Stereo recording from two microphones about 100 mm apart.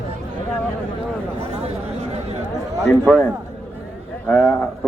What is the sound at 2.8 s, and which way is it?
Speech, centre (ahead or behind).